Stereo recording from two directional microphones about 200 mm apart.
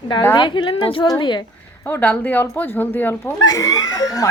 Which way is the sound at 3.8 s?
75° left (ahead or behind).